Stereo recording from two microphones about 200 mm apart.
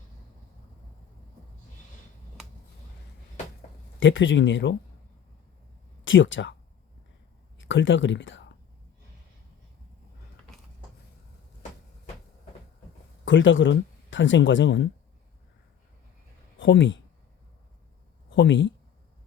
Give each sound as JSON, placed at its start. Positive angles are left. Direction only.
{"t": 4.0, "sound": "speech", "side_deg": 70}
{"t": 6.1, "sound": "speech", "side_deg": 70}
{"t": 7.6, "sound": "speech", "side_deg": 70}
{"t": 13.2, "sound": "speech", "side_deg": 70}
{"t": 16.6, "sound": "speech", "side_deg": 65}
{"t": 18.3, "sound": "speech", "side_deg": 65}